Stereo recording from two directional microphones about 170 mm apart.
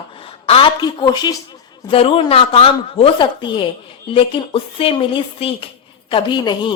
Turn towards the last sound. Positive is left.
turn(degrees=25)  # may be behind; listen again after turning